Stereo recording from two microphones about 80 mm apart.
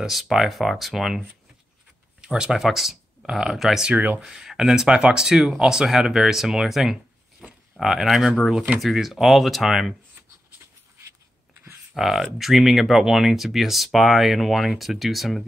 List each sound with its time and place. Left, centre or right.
0.0 s speech: centre
2.2 s speech: centre
3.9 s speech: right
4.2 s speech: centre
11.9 s speech: centre